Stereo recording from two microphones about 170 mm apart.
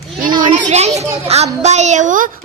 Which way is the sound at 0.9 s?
40° right (ahead or behind).